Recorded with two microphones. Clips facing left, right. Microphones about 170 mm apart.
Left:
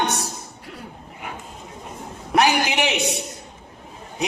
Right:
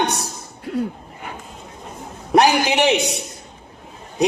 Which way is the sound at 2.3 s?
35° right (ahead or behind).